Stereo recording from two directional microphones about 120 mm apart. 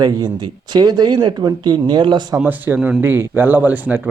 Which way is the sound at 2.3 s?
15° right (ahead or behind).